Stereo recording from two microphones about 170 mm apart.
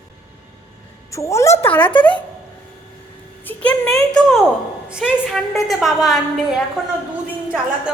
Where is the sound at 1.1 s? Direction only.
15° left (ahead or behind).